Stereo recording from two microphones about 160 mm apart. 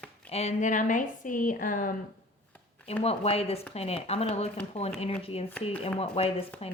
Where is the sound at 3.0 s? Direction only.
40° left (ahead or behind).